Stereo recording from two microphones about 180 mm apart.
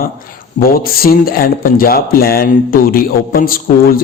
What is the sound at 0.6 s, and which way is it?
A man's voice, 55° left (ahead or behind).